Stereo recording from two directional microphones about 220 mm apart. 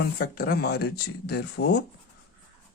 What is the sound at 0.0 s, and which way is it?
Speech, 45° left (ahead or behind).